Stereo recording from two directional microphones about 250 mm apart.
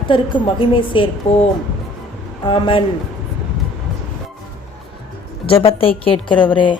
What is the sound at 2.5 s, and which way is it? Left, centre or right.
Speech, left.